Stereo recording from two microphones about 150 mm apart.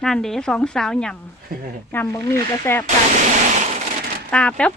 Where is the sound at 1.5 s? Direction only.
80° right.